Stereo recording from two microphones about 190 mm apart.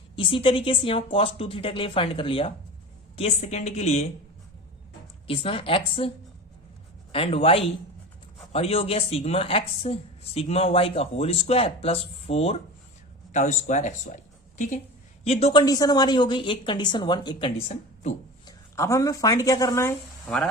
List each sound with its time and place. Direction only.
0.2 s a woman's voice: 25° left (ahead or behind)
5.3 s speech: 30° left (ahead or behind)
7.1 s a woman's voice: 30° left (ahead or behind)
15.2 s a woman's voice: 30° left (ahead or behind)
15.6 s speech: 20° left (ahead or behind)